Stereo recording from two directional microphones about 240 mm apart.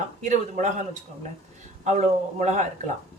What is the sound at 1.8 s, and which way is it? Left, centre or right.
A man's voice, right.